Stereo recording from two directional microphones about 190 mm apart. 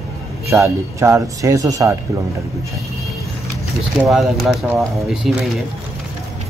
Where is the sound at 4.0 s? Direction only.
Centre (ahead or behind).